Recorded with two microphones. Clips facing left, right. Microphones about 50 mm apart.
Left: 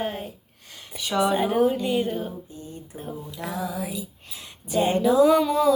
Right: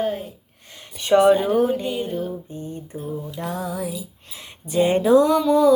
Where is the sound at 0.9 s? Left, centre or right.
Right.